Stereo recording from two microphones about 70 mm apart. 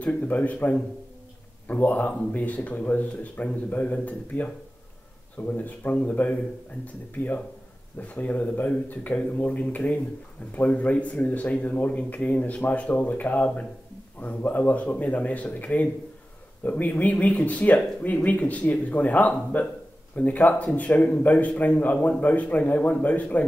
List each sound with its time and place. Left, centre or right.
0.0 s a man's voice: left
8.0 s a man's voice: left